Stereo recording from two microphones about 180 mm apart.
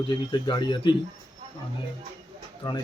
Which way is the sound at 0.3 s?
25° left (ahead or behind).